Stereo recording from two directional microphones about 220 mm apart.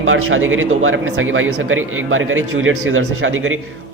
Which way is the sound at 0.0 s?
65° right (ahead or behind).